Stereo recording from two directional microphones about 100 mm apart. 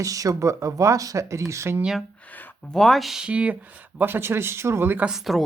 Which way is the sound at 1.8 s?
5° right (ahead or behind).